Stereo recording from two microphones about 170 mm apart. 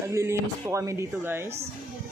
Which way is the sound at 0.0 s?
15° right (ahead or behind).